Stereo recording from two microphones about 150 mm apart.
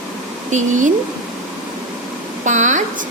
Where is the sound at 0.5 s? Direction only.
55° right (ahead or behind).